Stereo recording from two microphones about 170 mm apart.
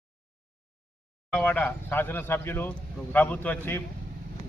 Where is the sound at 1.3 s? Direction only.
10° left (ahead or behind).